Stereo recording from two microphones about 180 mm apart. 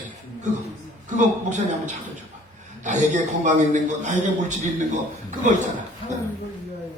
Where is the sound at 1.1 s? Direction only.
40° right (ahead or behind).